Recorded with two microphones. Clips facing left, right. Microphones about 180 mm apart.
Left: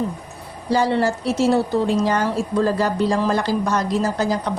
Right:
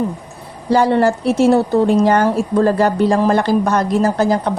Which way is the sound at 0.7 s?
55° right (ahead or behind).